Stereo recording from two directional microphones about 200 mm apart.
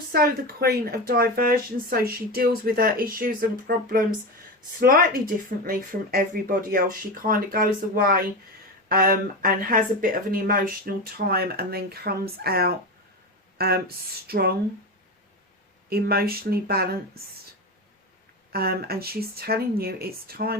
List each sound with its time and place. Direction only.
0.1 s speech: 50° right (ahead or behind)
15.9 s speech: 50° right (ahead or behind)
18.5 s speech: 50° right (ahead or behind)